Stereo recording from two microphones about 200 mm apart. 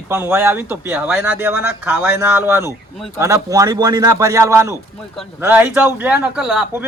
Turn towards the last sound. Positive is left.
turn(degrees=-5)  # may be behind; listen again after turning